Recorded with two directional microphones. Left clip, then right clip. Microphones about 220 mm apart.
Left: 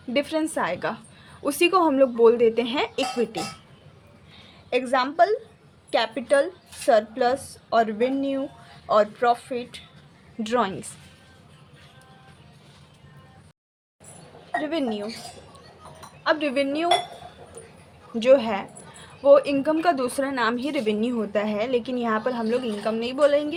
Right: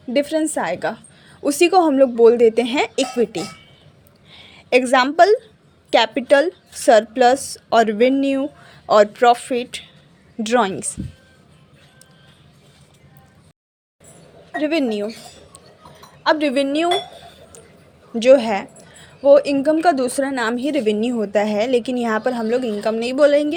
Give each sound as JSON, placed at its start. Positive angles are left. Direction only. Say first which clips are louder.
{"t": 0.1, "sound": "a woman's voice", "louder": "right 6 dB", "side_deg": -15}
{"t": 4.7, "sound": "a woman's voice", "louder": "right 8 dB", "side_deg": -35}
{"t": 14.6, "sound": "a woman's voice", "louder": "right 9 dB", "side_deg": -35}
{"t": 16.2, "sound": "a woman's voice", "louder": "right 6 dB", "side_deg": -30}
{"t": 18.2, "sound": "a woman's voice", "louder": "right 5 dB", "side_deg": -20}